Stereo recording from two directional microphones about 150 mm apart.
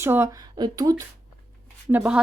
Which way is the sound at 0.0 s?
15° right (ahead or behind).